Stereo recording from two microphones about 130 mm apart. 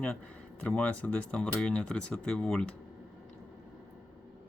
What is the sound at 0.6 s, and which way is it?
Speech, 10° left (ahead or behind).